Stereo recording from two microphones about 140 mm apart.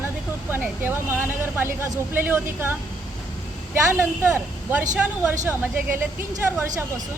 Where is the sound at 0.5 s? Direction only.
15° right (ahead or behind).